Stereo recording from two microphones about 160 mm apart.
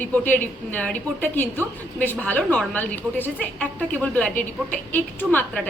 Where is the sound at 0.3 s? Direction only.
10° left (ahead or behind).